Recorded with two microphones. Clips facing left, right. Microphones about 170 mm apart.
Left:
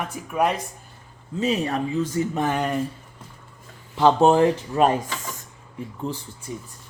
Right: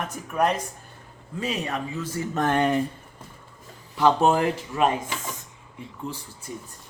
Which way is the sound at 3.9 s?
20° left (ahead or behind).